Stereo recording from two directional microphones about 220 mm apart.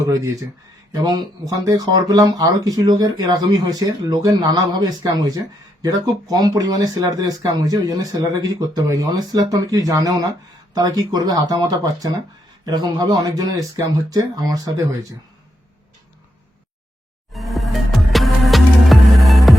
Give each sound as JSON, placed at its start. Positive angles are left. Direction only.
{"t": 0.0, "sound": "speech", "side_deg": -15}
{"t": 17.3, "sound": "music", "side_deg": 0}